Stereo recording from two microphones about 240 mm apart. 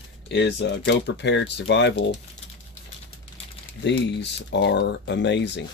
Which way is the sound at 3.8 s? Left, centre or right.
Left.